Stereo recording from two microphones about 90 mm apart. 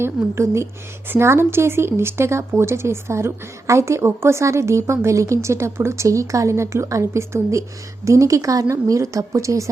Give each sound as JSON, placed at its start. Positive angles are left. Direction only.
{"t": 0.0, "sound": "speech", "side_deg": -30}